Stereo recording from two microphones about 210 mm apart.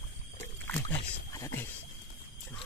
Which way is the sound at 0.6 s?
10° left (ahead or behind).